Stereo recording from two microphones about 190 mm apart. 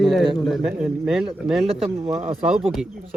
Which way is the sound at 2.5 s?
5° right (ahead or behind).